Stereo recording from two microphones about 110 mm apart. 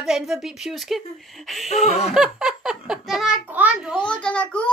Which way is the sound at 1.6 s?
85° left.